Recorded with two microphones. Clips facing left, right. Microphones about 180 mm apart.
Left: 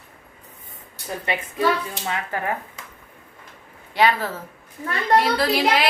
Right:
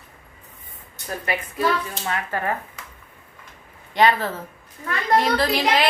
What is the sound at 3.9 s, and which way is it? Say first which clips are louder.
Speech: right 1 dB; 10° left (ahead or behind).